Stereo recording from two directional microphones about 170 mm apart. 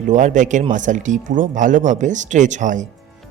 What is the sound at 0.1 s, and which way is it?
Speech, 45° right (ahead or behind).